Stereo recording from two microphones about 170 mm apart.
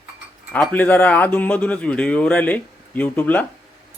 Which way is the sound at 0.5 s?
10° left (ahead or behind).